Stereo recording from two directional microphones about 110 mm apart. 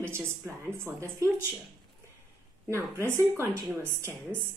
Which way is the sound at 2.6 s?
25° right (ahead or behind).